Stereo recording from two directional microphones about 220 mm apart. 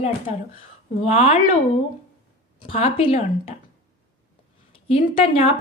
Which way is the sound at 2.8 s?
30° left (ahead or behind).